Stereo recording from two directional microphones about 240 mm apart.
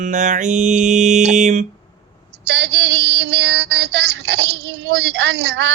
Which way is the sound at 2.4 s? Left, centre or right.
Right.